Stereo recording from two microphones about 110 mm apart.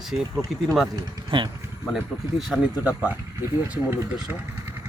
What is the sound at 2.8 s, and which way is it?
Speech, 15° right (ahead or behind).